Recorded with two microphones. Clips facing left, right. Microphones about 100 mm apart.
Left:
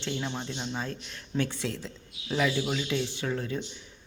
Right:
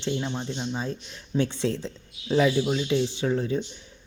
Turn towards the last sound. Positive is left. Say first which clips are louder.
# right 6 dB
turn(degrees=-20)  # may be behind; listen again after turning